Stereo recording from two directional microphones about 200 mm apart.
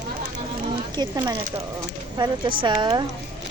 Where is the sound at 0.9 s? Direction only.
20° right (ahead or behind).